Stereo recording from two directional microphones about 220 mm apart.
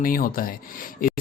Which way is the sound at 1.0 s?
40° left (ahead or behind).